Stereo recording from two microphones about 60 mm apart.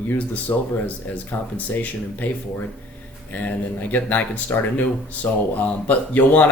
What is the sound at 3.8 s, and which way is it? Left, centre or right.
Speech, left.